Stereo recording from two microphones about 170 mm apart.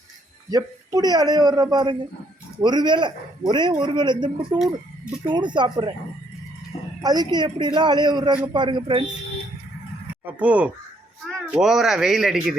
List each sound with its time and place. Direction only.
0.5 s a man's voice: 20° right (ahead or behind)
4.5 s speech: 5° right (ahead or behind)
5.3 s a man's voice: 25° right (ahead or behind)
7.0 s a man's voice: 25° right (ahead or behind)
10.3 s speech: 10° right (ahead or behind)